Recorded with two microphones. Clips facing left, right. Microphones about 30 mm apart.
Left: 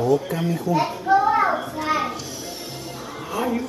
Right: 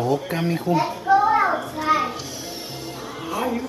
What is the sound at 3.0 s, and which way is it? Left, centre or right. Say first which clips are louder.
Music: even; centre.